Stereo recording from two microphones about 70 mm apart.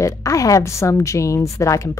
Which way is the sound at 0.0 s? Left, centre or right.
Left.